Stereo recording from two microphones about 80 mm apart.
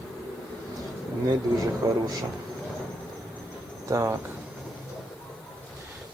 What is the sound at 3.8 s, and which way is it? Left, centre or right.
Speech, right.